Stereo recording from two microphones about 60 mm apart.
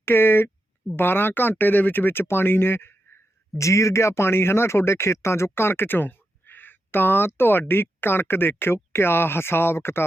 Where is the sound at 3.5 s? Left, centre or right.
Left.